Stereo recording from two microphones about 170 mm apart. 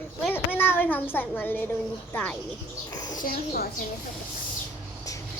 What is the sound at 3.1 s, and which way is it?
Speech, 60° left (ahead or behind).